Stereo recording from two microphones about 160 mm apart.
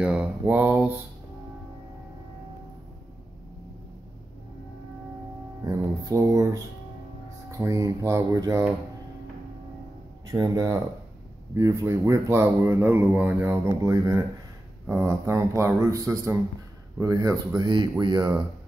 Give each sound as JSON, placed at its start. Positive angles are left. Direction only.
{"t": 0.0, "sound": "speech", "side_deg": -5}
{"t": 5.6, "sound": "a man's voice", "side_deg": -20}
{"t": 10.3, "sound": "a man's voice", "side_deg": -20}